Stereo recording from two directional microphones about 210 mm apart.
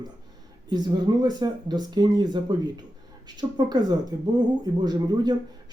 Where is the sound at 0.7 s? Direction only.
20° right (ahead or behind).